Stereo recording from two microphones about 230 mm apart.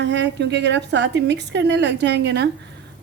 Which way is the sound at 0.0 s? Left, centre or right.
Right.